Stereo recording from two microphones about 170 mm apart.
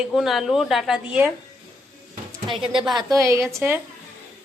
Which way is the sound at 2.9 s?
20° right (ahead or behind).